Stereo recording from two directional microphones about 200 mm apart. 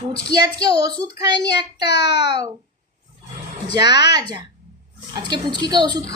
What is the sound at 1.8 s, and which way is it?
Speech, 55° left (ahead or behind).